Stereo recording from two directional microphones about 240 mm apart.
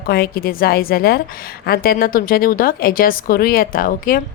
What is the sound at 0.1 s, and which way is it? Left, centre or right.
Speech, left.